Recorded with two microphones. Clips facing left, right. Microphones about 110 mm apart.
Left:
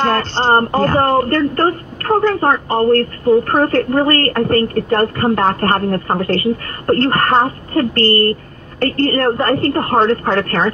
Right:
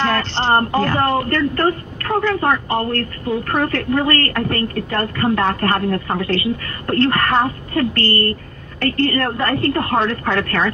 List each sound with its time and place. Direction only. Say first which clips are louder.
0.0 s a woman's voice: left 3 dB; 45° left (ahead or behind)